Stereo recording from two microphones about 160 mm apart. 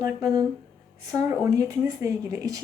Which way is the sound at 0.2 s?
20° right (ahead or behind).